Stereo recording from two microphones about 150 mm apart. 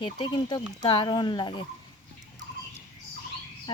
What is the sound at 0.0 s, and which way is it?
Speech, 30° left (ahead or behind).